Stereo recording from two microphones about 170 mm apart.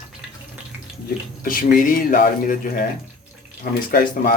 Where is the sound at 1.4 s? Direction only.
55° left (ahead or behind).